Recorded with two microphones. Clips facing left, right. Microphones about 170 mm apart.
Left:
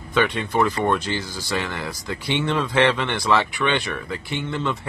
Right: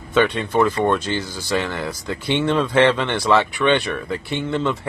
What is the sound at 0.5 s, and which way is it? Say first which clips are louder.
Speech: right 3 dB; 15° left (ahead or behind).